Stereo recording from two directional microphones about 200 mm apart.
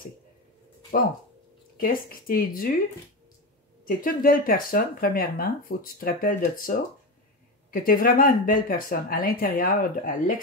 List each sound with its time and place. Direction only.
1.8 s speech: 45° left (ahead or behind)
3.8 s speech: 45° left (ahead or behind)